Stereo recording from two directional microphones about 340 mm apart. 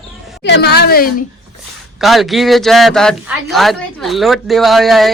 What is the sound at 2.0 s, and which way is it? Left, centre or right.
A woman's voice, centre.